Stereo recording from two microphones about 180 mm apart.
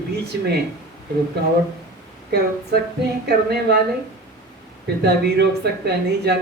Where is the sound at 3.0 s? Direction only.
65° right (ahead or behind).